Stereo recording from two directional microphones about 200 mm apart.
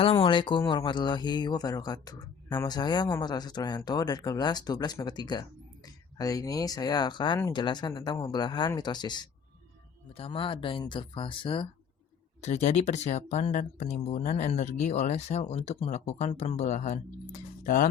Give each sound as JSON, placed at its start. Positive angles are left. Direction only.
{"t": 0.0, "sound": "speech", "side_deg": 25}